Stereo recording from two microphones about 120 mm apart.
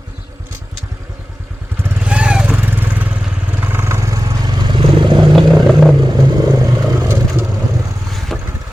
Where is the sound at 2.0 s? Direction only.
10° right (ahead or behind); by 5.3 s 40° right (ahead or behind).